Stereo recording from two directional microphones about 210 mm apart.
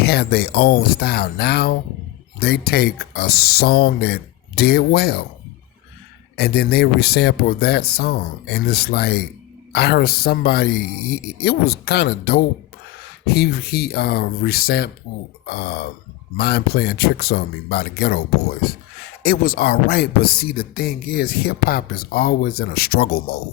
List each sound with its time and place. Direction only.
0.0 s speech: 50° left (ahead or behind)
6.3 s speech: 50° left (ahead or behind)